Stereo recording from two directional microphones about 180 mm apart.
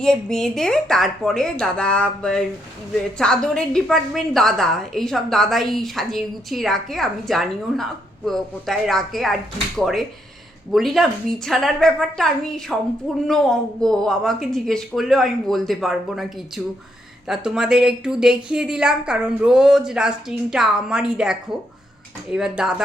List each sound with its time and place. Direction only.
0.0 s a woman's voice: 5° left (ahead or behind)
17.2 s a woman's voice: 5° right (ahead or behind)